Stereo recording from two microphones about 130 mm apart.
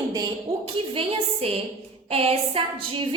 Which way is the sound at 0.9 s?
45° right (ahead or behind).